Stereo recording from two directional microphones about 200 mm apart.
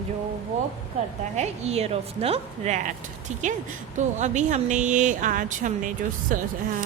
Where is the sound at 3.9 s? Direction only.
35° right (ahead or behind).